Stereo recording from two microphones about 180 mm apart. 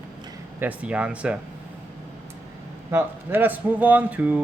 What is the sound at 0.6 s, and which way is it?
Speech, 10° right (ahead or behind).